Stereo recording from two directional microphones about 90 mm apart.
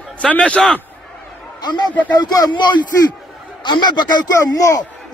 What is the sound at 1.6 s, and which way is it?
A man's voice, 50° left (ahead or behind).